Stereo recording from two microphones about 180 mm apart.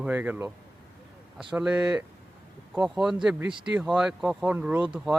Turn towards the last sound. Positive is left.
turn(degrees=-5)  # may be behind; listen again after turning